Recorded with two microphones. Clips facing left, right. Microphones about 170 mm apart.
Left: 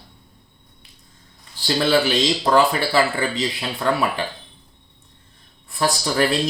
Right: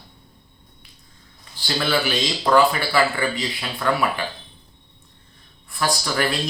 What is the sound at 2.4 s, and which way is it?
Speech, 30° left (ahead or behind).